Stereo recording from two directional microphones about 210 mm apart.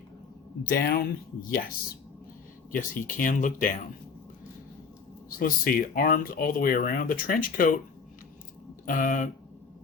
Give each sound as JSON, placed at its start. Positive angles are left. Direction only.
{"t": 0.7, "sound": "speech", "side_deg": 45}
{"t": 2.7, "sound": "speech", "side_deg": 40}
{"t": 5.4, "sound": "speech", "side_deg": 40}
{"t": 8.9, "sound": "speech", "side_deg": 40}